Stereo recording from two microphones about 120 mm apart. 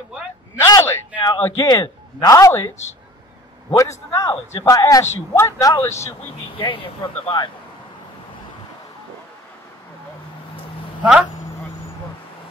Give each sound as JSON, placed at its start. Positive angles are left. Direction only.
{"t": 0.6, "sound": "a sound", "side_deg": 30}
{"t": 1.4, "sound": "a man's voice", "side_deg": 30}
{"t": 3.7, "sound": "a man's voice", "side_deg": 25}
{"t": 6.6, "sound": "speech", "side_deg": 50}
{"t": 11.0, "sound": "speech", "side_deg": -5}